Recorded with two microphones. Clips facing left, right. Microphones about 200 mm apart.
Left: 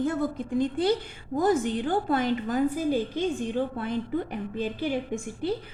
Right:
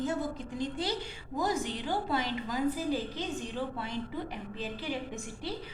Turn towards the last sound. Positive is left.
turn(degrees=50)  # may be behind; listen again after turning